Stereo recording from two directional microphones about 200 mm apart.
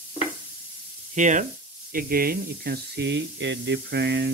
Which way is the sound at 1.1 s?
40° right (ahead or behind).